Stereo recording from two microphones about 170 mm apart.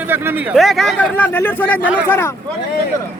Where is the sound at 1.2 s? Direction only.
10° left (ahead or behind).